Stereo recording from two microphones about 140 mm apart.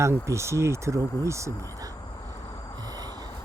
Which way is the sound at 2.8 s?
30° right (ahead or behind).